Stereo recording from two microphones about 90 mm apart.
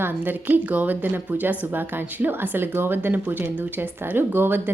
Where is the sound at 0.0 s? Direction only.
20° right (ahead or behind).